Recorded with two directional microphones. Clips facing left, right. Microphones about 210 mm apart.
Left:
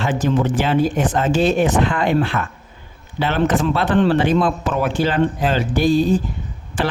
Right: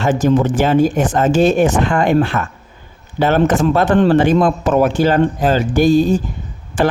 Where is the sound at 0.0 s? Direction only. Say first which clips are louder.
Right 5 dB; 45° right (ahead or behind).